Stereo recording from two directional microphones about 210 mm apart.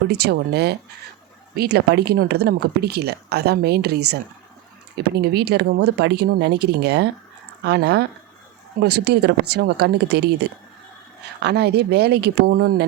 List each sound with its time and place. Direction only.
0.1 s speech: 50° right (ahead or behind)
11.3 s speech: 50° right (ahead or behind)